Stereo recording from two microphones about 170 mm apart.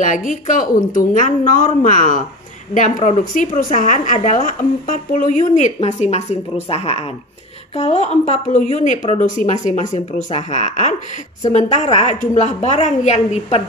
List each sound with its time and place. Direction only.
0.0 s a woman's voice: 50° left (ahead or behind)